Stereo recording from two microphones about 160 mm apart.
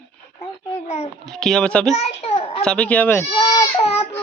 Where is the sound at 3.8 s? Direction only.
40° left (ahead or behind).